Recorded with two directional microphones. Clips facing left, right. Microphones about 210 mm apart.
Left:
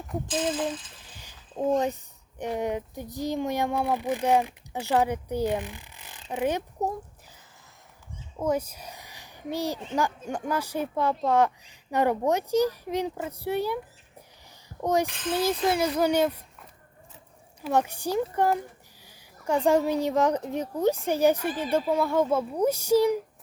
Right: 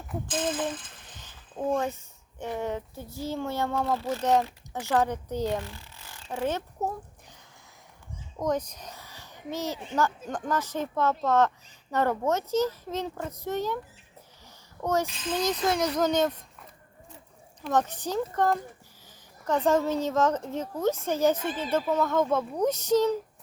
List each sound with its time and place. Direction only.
1.1 s a sound: 10° left (ahead or behind)
2.4 s speech: 15° left (ahead or behind)
8.4 s speech: 10° left (ahead or behind)